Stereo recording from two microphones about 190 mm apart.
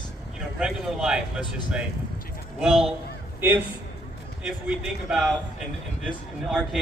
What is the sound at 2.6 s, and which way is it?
A man's voice, centre (ahead or behind).